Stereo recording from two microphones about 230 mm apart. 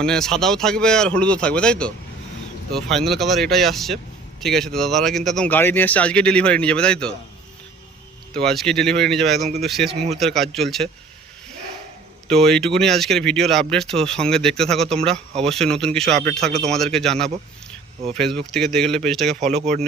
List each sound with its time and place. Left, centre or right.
0.0 s speech: centre
8.3 s speech: centre
12.3 s speech: centre
19.5 s speech: right